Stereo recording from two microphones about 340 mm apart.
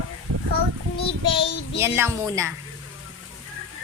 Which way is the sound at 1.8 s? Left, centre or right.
Centre.